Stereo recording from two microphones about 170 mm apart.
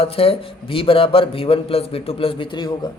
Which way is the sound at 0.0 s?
35° left (ahead or behind).